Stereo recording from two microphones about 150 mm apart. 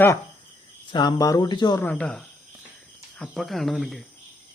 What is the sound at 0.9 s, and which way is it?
Speech, 30° left (ahead or behind).